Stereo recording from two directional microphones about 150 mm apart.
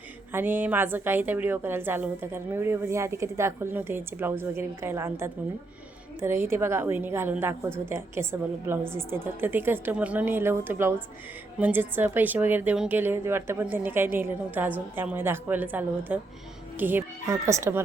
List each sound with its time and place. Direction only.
0.3 s a woman's voice: 10° right (ahead or behind)